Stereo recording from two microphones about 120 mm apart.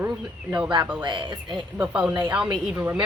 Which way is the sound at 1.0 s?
40° right (ahead or behind).